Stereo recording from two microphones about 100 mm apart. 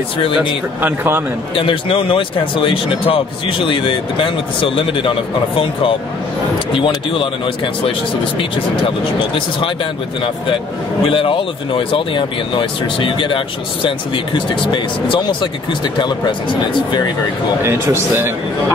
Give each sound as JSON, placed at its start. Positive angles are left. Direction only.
{"t": 0.7, "sound": "speech", "side_deg": -20}
{"t": 1.5, "sound": "speech", "side_deg": 60}
{"t": 7.1, "sound": "speech", "side_deg": 60}
{"t": 11.1, "sound": "speech", "side_deg": 60}
{"t": 17.6, "sound": "speech", "side_deg": -25}